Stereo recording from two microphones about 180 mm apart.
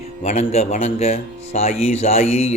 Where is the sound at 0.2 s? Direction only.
35° left (ahead or behind).